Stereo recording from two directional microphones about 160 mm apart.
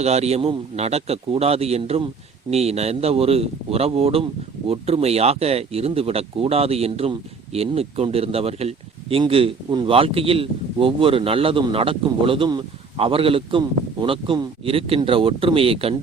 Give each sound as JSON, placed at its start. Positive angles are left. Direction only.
{"t": 0.0, "sound": "speech", "side_deg": -40}